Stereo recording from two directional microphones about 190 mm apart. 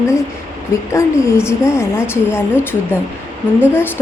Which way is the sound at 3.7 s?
10° left (ahead or behind).